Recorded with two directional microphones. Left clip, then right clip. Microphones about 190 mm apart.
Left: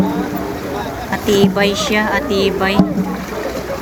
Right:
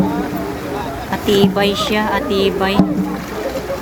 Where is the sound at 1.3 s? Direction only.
20° right (ahead or behind).